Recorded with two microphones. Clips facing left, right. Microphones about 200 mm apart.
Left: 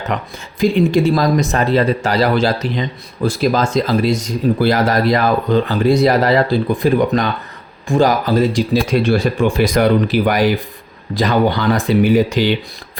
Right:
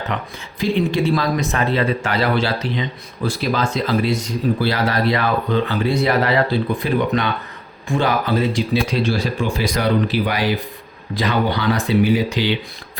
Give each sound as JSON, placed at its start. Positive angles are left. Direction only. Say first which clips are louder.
{"t": 0.6, "sound": "speech", "louder": "left 5 dB", "side_deg": 45}